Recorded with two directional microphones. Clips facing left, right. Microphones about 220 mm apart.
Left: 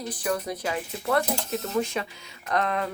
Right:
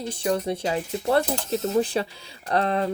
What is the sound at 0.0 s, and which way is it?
Speech, 25° right (ahead or behind).